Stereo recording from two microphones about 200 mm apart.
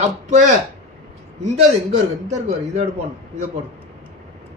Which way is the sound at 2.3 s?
35° right (ahead or behind).